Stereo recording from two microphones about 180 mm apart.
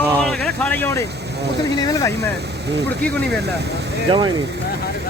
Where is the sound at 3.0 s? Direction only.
10° left (ahead or behind).